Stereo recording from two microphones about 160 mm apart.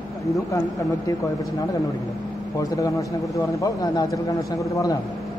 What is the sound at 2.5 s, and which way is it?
A man's voice, 20° left (ahead or behind).